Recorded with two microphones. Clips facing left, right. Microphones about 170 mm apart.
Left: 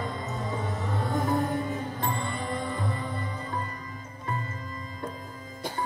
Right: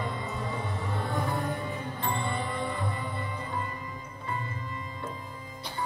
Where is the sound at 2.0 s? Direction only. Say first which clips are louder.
Even; 45° left (ahead or behind).